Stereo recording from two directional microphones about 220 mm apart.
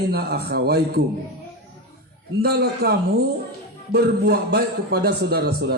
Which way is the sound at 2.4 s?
45° right (ahead or behind).